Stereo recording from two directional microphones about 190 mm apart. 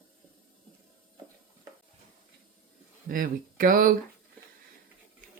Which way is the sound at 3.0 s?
45° right (ahead or behind).